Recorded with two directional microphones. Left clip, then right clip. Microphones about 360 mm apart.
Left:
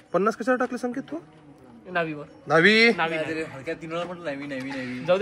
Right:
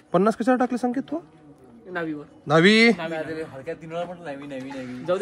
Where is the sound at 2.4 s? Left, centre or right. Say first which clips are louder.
Right 1 dB; right.